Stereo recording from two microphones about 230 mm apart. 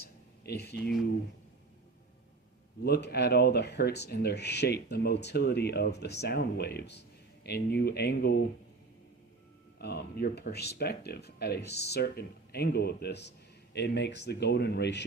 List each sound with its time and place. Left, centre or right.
0.0 s a sound: left
2.8 s speech: left
9.7 s speech: left